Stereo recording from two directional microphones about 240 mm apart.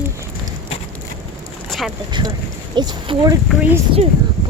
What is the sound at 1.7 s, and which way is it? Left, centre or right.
Boat, centre.